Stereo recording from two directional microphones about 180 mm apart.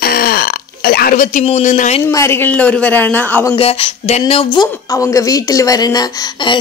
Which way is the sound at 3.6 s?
30° left (ahead or behind).